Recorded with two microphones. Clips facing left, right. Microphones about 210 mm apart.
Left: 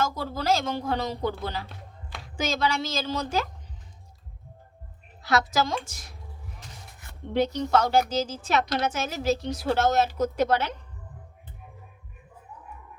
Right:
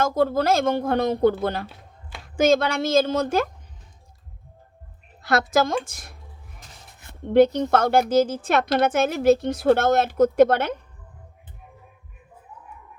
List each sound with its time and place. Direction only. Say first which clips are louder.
0.0 s a woman's voice: right 8 dB; 55° right (ahead or behind)
5.2 s a woman's voice: right 4 dB; 50° right (ahead or behind)
7.3 s speech: right 8 dB; 55° right (ahead or behind)